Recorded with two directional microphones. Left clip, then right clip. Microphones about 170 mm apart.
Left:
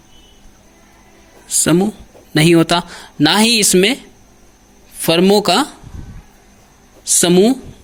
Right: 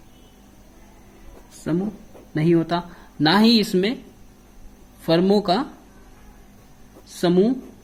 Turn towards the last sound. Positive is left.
turn(degrees=30)  # may be behind; listen again after turning